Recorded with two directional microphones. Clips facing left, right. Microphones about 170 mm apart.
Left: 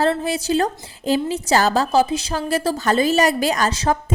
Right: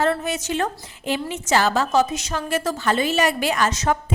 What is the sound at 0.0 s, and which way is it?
A woman's voice, 30° left (ahead or behind).